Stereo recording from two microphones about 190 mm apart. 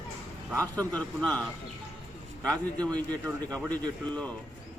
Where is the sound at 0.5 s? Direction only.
15° right (ahead or behind).